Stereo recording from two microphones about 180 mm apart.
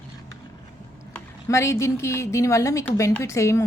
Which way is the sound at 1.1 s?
15° left (ahead or behind).